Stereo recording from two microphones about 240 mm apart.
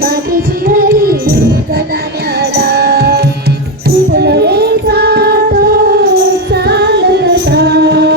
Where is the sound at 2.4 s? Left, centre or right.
Right.